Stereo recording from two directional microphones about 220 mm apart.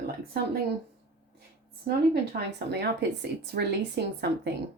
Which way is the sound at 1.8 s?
45° right (ahead or behind).